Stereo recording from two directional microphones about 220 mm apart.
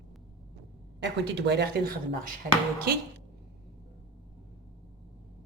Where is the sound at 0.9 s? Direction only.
50° right (ahead or behind).